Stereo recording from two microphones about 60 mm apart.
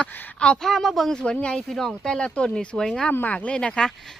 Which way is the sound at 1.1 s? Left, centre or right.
Centre.